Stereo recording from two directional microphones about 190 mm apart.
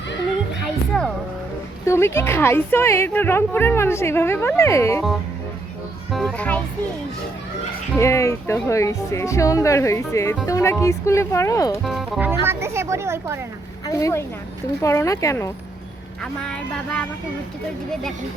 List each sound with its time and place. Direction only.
0.6 s music: centre (ahead or behind)
1.9 s a woman's voice: 15° left (ahead or behind)
6.1 s a child's voice: centre (ahead or behind)
7.9 s a woman's voice: 15° left (ahead or behind)
11.8 s speech: centre (ahead or behind)
12.3 s speech: 15° right (ahead or behind)
13.8 s a woman's voice: 15° left (ahead or behind)
16.4 s speech: 5° left (ahead or behind)